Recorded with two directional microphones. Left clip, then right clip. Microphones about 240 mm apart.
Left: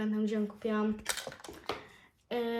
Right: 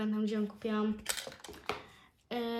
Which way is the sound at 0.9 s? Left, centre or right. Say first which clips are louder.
Left 2 dB; centre.